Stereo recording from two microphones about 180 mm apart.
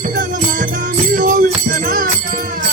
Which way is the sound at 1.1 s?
45° right (ahead or behind).